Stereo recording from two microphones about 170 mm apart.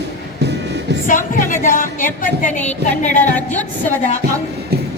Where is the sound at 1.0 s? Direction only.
50° left (ahead or behind).